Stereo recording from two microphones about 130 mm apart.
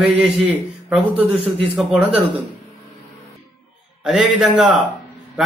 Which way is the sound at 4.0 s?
5° right (ahead or behind).